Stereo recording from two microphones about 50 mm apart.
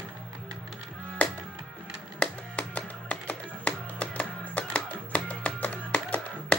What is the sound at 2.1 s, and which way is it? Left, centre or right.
Music, left.